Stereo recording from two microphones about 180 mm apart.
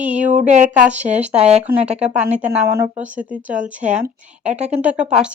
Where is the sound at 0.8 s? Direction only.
5° right (ahead or behind).